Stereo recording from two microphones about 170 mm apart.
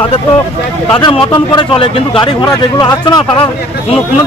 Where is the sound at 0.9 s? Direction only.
30° left (ahead or behind).